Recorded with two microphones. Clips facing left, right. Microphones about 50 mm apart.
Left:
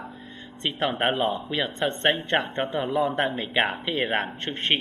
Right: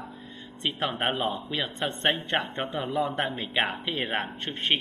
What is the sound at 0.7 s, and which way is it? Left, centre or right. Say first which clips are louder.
Speech: left 3 dB; centre.